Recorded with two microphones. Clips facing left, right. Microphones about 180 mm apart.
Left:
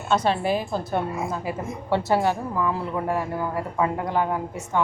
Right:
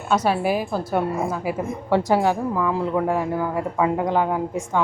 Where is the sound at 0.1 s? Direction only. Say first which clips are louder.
Right 2 dB; 10° right (ahead or behind).